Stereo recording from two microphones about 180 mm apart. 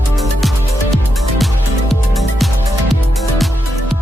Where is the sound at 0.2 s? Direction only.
Centre (ahead or behind).